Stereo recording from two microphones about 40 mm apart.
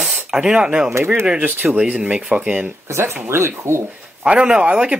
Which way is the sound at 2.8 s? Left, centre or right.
Right.